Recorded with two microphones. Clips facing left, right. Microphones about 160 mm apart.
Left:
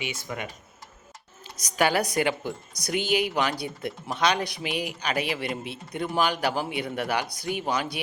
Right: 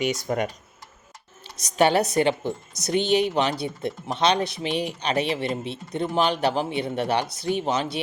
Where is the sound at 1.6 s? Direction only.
25° right (ahead or behind).